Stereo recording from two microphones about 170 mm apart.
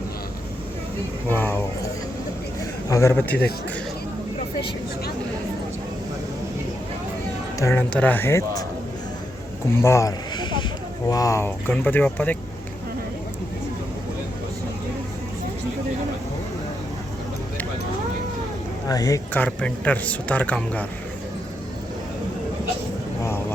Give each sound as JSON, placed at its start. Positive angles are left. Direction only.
{"t": 1.3, "sound": "vehicle", "side_deg": 10}
{"t": 2.9, "sound": "speech", "side_deg": 15}
{"t": 7.6, "sound": "speech", "side_deg": 15}
{"t": 9.7, "sound": "speech", "side_deg": 15}
{"t": 18.9, "sound": "speech", "side_deg": 20}